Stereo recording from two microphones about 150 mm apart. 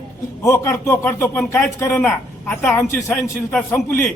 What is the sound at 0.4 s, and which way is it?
Speech, 15° left (ahead or behind).